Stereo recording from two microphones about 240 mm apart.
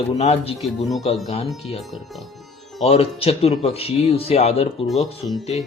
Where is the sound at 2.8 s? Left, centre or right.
Left.